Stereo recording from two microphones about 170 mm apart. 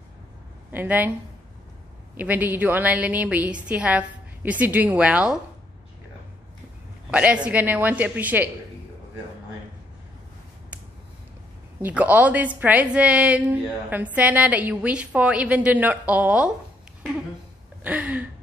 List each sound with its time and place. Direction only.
0.7 s speech: 10° right (ahead or behind)
2.1 s a woman's voice: 10° right (ahead or behind)
7.1 s a woman's voice: 5° right (ahead or behind)
11.8 s a woman's voice: 10° right (ahead or behind)
17.8 s a woman's voice: 10° right (ahead or behind)